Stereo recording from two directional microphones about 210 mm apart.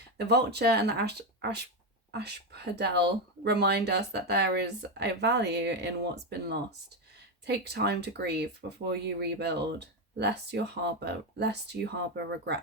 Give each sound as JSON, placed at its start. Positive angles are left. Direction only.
{"t": 0.2, "sound": "speech", "side_deg": -50}